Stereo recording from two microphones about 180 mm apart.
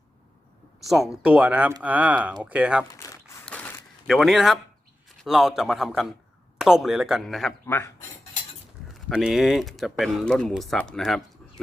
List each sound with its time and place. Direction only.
0.9 s speech: centre (ahead or behind)
3.0 s a sound: 15° left (ahead or behind); by 4.6 s centre (ahead or behind)
5.2 s speech: centre (ahead or behind)
8.9 s speech: centre (ahead or behind)